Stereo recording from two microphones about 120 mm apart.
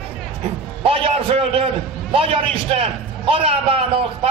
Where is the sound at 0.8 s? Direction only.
50° right (ahead or behind).